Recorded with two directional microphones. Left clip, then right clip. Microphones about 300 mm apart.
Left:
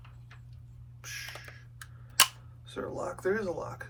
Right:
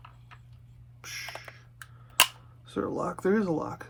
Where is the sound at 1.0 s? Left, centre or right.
Right.